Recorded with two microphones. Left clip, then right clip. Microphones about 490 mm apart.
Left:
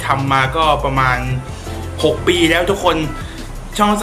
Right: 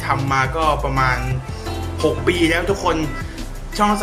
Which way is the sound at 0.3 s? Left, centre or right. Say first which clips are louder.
Left 4 dB; right.